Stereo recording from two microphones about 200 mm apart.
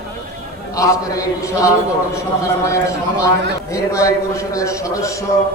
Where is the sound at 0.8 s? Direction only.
15° left (ahead or behind).